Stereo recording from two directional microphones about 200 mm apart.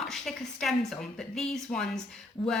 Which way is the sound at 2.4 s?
25° left (ahead or behind).